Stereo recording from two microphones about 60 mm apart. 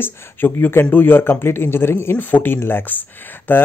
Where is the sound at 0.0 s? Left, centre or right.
Left.